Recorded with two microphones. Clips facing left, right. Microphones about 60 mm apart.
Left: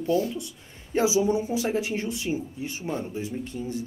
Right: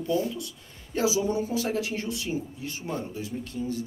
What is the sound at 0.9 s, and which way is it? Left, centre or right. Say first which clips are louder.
Speech: left 3 dB; left.